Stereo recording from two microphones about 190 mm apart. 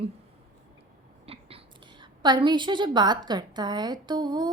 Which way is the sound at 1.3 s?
30° right (ahead or behind).